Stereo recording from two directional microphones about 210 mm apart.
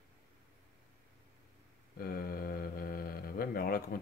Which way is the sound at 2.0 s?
45° left (ahead or behind).